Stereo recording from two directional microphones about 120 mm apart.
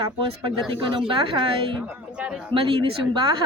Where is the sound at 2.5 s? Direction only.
50° right (ahead or behind).